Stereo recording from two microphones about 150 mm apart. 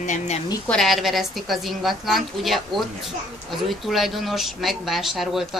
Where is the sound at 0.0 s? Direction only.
50° left (ahead or behind).